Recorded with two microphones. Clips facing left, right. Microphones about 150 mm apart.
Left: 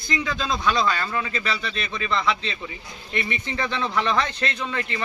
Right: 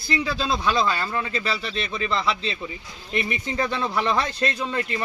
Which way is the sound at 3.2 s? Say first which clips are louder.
Right 2 dB; 15° right (ahead or behind).